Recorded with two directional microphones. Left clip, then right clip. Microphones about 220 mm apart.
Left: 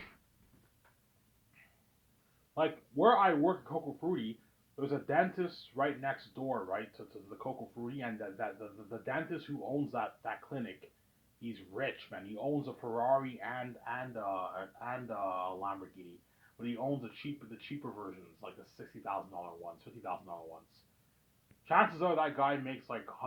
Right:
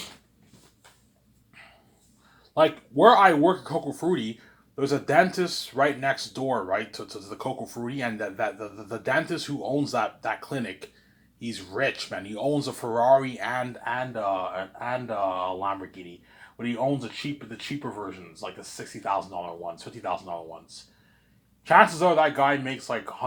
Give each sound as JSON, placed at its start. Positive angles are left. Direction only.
{"t": 2.6, "sound": "speech", "side_deg": -25}
{"t": 21.6, "sound": "speech", "side_deg": -25}